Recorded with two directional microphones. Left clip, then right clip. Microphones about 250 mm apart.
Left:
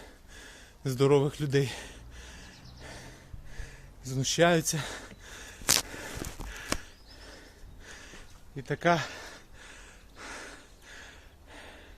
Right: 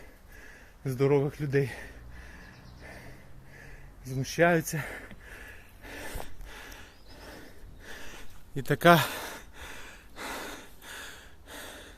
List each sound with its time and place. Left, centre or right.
0.9 s speech: left
4.0 s speech: left
4.4 s speech: centre
4.7 s gasp: centre
5.9 s a sound: centre
7.9 s gasp: right